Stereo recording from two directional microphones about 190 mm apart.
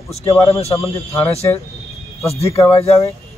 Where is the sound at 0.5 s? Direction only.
35° left (ahead or behind).